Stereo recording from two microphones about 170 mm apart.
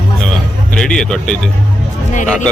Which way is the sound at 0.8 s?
5° left (ahead or behind).